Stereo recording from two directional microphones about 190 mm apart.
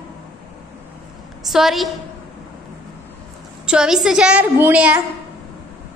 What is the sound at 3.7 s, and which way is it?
A woman's voice, 5° right (ahead or behind).